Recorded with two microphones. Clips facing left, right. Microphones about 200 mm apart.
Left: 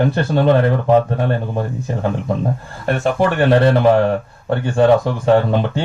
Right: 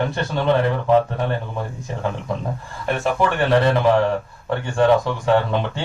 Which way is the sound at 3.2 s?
40° left (ahead or behind).